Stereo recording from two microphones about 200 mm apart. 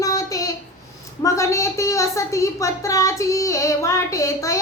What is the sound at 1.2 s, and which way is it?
Child singing, 15° left (ahead or behind).